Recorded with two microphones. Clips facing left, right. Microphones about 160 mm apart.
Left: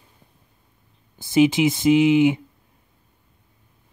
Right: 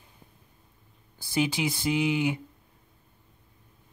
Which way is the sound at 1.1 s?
20° left (ahead or behind).